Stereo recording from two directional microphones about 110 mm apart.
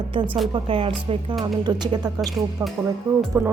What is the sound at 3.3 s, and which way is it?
Music, 25° right (ahead or behind).